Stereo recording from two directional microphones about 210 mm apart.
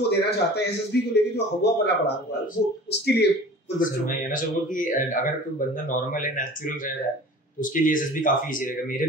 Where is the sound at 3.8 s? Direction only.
40° left (ahead or behind).